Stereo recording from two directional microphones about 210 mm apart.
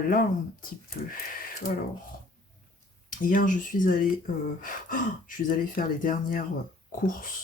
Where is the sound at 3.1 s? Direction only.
40° left (ahead or behind).